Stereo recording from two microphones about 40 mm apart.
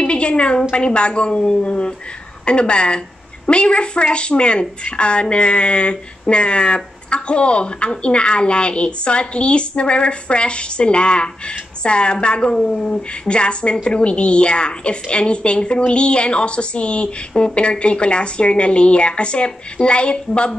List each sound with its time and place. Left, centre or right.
0.0 s a woman's voice: left